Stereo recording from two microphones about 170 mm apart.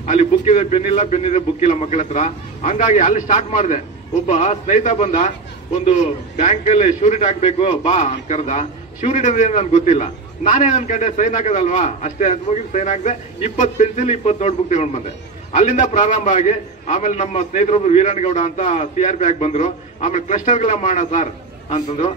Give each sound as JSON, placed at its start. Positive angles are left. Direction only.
{"t": 0.0, "sound": "a man's voice", "side_deg": 40}